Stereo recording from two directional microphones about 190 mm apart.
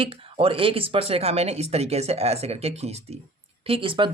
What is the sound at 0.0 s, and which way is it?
Speech, 30° right (ahead or behind).